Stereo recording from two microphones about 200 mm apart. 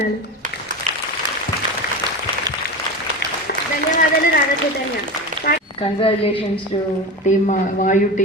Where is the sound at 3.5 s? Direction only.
50° left (ahead or behind).